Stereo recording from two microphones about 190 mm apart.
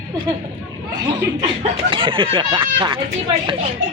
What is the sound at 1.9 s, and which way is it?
Speech, 25° right (ahead or behind).